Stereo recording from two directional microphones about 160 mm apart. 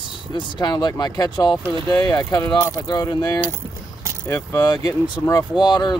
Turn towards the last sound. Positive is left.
turn(degrees=25)  # may be behind; listen again after turning